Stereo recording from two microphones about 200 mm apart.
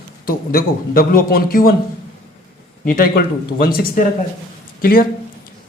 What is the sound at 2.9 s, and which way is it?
A man's voice, 45° left (ahead or behind).